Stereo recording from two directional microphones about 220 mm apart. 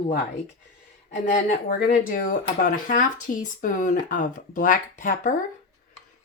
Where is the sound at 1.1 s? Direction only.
35° left (ahead or behind).